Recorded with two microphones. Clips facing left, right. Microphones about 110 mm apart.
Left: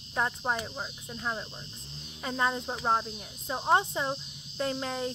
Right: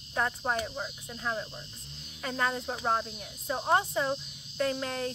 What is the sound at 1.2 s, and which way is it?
Speech, 20° left (ahead or behind).